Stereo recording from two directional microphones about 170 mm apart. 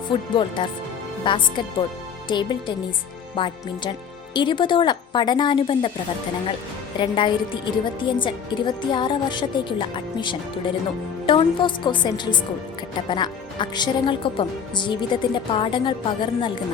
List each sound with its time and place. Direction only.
0.1 s speech: 30° left (ahead or behind)
7.0 s speech: 25° left (ahead or behind)